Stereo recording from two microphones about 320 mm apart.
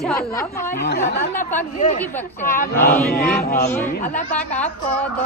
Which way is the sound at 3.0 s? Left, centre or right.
Left.